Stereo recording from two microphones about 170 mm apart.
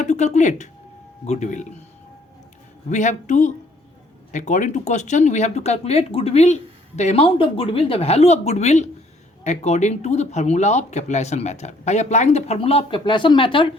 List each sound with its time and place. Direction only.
0.0 s speech: 45° left (ahead or behind)
2.9 s speech: 45° left (ahead or behind); by 13.7 s 30° left (ahead or behind)